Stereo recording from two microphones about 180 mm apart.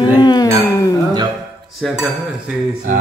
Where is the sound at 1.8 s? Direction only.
Centre (ahead or behind).